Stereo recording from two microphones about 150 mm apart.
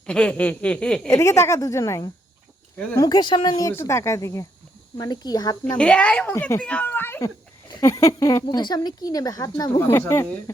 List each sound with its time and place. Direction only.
0.0 s speech: 5° left (ahead or behind)
1.0 s speech: 20° left (ahead or behind)
2.7 s speech: 10° left (ahead or behind)
3.0 s speech: 30° left (ahead or behind)
3.6 s speech: 20° left (ahead or behind)
5.6 s speech: 10° left (ahead or behind); by 9.8 s 25° left (ahead or behind)
9.9 s speech: 15° left (ahead or behind)